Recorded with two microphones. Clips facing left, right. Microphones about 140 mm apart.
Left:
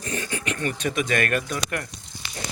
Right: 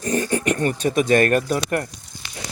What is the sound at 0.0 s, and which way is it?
Speech, 40° right (ahead or behind).